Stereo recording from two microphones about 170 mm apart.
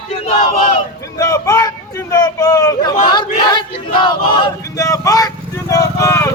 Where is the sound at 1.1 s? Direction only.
20° left (ahead or behind).